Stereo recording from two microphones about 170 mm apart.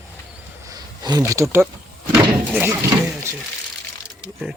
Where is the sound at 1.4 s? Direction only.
20° right (ahead or behind).